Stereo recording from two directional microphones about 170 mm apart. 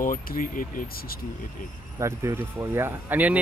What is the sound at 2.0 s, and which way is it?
Speech, 15° right (ahead or behind).